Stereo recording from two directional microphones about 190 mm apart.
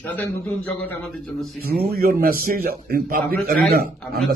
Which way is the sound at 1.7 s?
50° right (ahead or behind).